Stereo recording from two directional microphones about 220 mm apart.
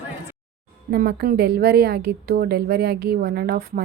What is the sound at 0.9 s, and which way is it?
A woman's voice, 45° right (ahead or behind).